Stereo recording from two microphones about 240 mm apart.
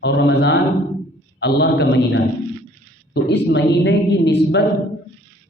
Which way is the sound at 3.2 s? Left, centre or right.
Left.